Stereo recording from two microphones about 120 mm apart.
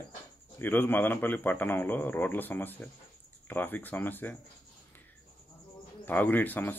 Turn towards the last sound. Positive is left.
turn(degrees=15)  # may be behind; listen again after turning